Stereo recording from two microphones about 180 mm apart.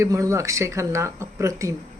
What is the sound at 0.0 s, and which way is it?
Speech, 15° right (ahead or behind).